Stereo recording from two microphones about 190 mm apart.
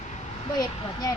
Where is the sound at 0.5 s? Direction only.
20° left (ahead or behind).